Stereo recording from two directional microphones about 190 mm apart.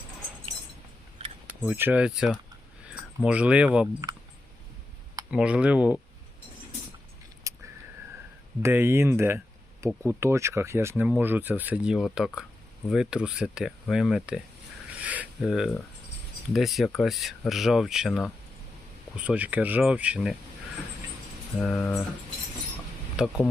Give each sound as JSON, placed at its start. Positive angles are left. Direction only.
{"t": 1.6, "sound": "speech", "side_deg": -10}
{"t": 5.3, "sound": "speech", "side_deg": -5}
{"t": 7.5, "sound": "a sound", "side_deg": -15}
{"t": 8.6, "sound": "speech", "side_deg": -10}
{"t": 15.0, "sound": "a sound", "side_deg": -5}
{"t": 16.5, "sound": "speech", "side_deg": 0}
{"t": 21.6, "sound": "speech", "side_deg": 5}
{"t": 23.2, "sound": "speech", "side_deg": -5}